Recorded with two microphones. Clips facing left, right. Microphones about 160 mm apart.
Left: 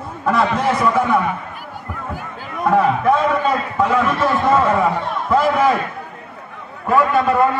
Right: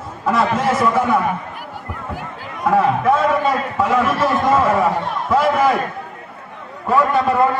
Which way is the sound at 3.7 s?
10° right (ahead or behind).